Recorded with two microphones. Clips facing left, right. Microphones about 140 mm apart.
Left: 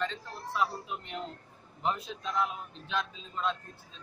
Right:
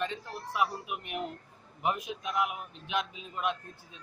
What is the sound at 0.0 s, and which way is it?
A man's voice, 15° right (ahead or behind).